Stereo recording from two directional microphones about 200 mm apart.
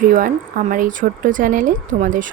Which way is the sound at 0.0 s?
45° right (ahead or behind).